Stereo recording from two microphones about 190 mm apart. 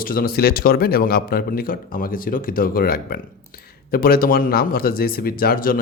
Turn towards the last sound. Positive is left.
turn(degrees=50)  # may be behind; listen again after turning